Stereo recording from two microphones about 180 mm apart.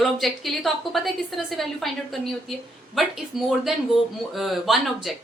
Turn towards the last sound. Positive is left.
turn(degrees=0)  # may be behind; listen again after turning